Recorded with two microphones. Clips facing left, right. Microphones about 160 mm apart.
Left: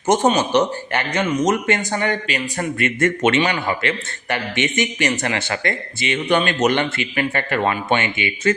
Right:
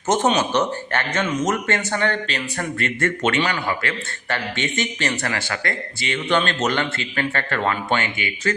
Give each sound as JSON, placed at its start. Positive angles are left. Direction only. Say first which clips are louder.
{"t": 0.3, "sound": "speech", "louder": "left 3 dB", "side_deg": 10}